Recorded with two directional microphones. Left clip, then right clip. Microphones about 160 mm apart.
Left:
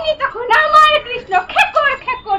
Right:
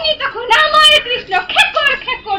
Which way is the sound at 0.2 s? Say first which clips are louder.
Even; 5° left (ahead or behind).